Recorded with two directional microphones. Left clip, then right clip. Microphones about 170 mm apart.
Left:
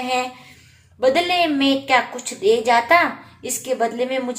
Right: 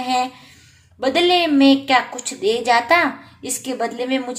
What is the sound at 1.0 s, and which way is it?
A woman's voice, 25° right (ahead or behind).